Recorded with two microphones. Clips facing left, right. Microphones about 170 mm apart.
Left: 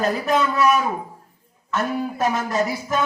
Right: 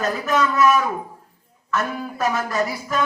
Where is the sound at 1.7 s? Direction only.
25° left (ahead or behind).